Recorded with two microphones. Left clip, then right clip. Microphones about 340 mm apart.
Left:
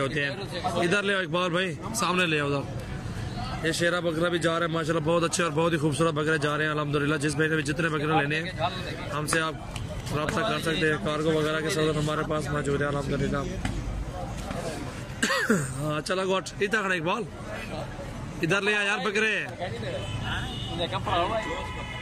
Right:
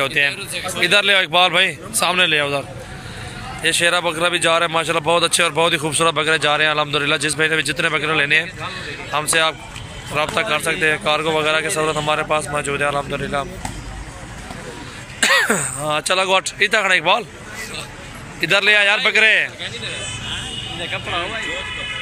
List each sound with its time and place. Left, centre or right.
0.3 s a man's voice: left
0.8 s speech: centre
3.6 s speech: centre
10.6 s a man's voice: right
11.4 s speech: centre
15.1 s throat clearing: centre
15.9 s speech: centre
18.4 s speech: centre
20.8 s a man's voice: left